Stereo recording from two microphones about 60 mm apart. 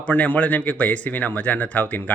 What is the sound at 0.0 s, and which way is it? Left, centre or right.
Speech, left.